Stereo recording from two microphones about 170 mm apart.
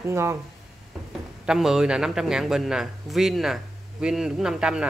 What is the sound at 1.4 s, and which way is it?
A man's voice, 5° right (ahead or behind).